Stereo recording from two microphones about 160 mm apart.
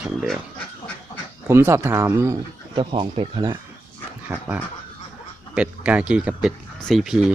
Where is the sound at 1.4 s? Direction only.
15° right (ahead or behind).